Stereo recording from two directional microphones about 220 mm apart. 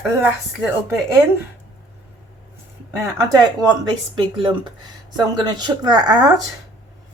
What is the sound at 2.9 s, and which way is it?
Speech, 15° right (ahead or behind).